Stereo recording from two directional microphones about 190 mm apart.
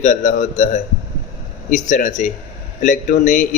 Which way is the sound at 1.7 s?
40° left (ahead or behind).